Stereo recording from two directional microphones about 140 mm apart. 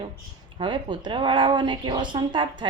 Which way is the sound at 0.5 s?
35° right (ahead or behind).